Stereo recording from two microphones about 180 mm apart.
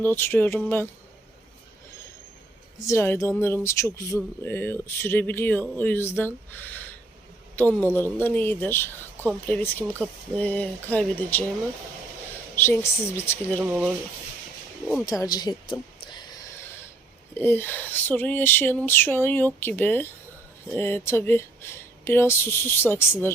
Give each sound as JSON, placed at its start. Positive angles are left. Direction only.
{"t": 0.0, "sound": "speech", "side_deg": 10}
{"t": 2.8, "sound": "a man's voice", "side_deg": 15}
{"t": 12.5, "sound": "speech", "side_deg": 15}
{"t": 13.6, "sound": "speech", "side_deg": -10}
{"t": 15.0, "sound": "speech", "side_deg": 20}
{"t": 15.7, "sound": "a sound", "side_deg": 25}
{"t": 17.3, "sound": "speech", "side_deg": 10}